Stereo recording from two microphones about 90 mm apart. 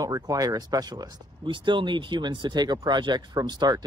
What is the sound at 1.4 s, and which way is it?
Speech, 65° right (ahead or behind).